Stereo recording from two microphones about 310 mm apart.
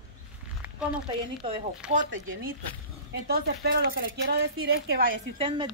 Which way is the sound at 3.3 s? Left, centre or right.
Right.